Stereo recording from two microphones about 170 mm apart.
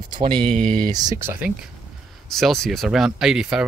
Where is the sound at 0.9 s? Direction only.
25° right (ahead or behind).